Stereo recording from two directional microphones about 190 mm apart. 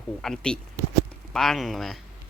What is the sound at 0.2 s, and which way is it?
Speech, 5° left (ahead or behind).